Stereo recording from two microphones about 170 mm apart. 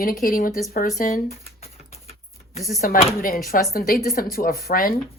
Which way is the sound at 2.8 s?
55° left (ahead or behind).